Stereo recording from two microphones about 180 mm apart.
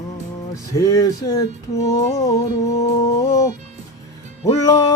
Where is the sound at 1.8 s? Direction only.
15° left (ahead or behind).